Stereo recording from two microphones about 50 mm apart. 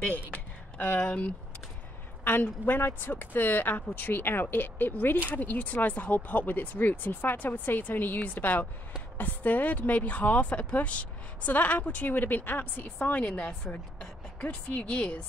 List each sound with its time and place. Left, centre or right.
0.3 s a sound: left
2.2 s speech: left
13.1 s speech: left